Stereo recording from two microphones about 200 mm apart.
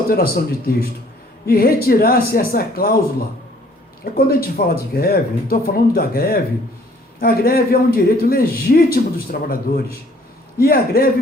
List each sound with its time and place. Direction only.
0.1 s speech: 50° left (ahead or behind)
4.0 s speech: 50° left (ahead or behind)